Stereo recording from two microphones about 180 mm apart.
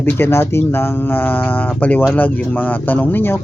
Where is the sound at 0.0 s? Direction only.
10° left (ahead or behind).